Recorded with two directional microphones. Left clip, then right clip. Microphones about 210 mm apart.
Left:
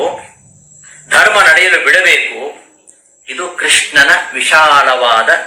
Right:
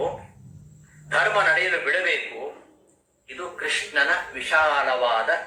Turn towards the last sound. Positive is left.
turn(degrees=40)  # may be behind; listen again after turning